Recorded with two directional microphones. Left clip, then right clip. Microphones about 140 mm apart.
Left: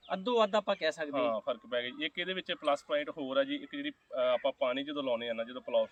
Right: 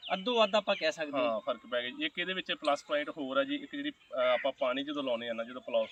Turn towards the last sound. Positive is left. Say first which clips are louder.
# left 1 dB
turn(degrees=25)  # may be behind; listen again after turning